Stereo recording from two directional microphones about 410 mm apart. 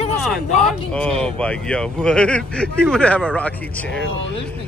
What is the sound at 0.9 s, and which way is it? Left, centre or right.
Speech, centre.